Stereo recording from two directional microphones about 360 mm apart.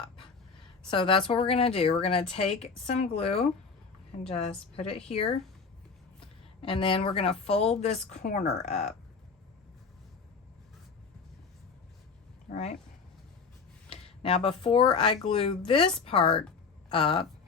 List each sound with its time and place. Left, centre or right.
0.9 s speech: centre
4.8 s speech: centre
6.6 s speech: centre
13.9 s speech: centre